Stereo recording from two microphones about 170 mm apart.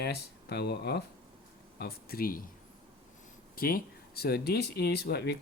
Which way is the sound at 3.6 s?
60° left (ahead or behind).